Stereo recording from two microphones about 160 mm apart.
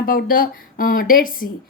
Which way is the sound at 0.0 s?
65° left (ahead or behind).